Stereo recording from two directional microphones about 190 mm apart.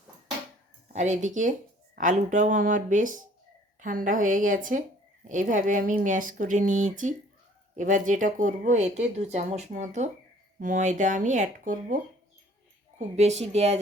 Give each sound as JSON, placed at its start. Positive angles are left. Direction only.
{"t": 0.9, "sound": "speech", "side_deg": -40}
{"t": 13.0, "sound": "speech", "side_deg": -35}